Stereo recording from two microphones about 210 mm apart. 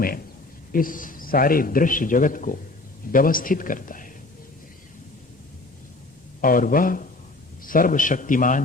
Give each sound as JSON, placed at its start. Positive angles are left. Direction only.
{"t": 0.7, "sound": "a man's voice", "side_deg": 40}
{"t": 6.4, "sound": "a man's voice", "side_deg": 40}